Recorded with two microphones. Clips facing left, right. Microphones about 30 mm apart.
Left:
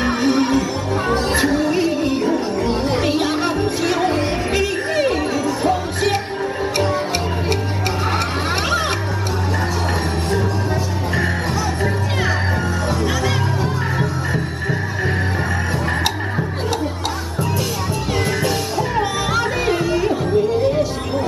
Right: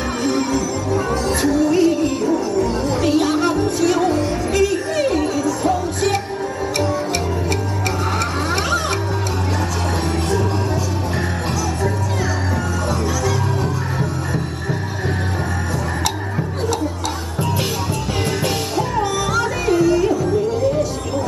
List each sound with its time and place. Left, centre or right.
0.0 s music: left
18.9 s music: left